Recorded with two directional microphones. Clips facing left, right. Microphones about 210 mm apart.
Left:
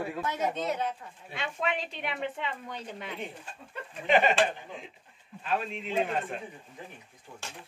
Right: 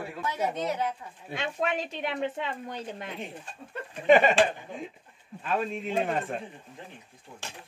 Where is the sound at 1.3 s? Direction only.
45° right (ahead or behind).